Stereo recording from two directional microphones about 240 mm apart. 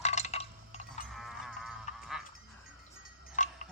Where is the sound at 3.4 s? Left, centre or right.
Left.